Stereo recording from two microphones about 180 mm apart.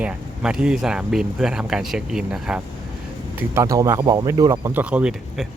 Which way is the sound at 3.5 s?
15° right (ahead or behind).